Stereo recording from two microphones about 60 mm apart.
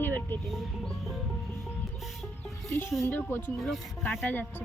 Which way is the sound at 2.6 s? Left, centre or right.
Left.